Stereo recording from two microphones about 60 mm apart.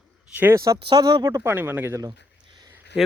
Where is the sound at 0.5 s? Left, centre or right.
Right.